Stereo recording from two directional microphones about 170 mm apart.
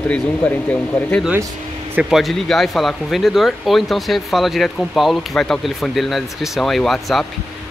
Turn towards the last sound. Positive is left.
turn(degrees=0)  # may be behind; listen again after turning